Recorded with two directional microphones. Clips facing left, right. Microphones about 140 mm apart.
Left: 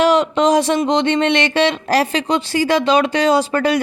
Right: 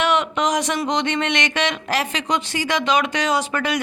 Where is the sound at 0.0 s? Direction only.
35° left (ahead or behind).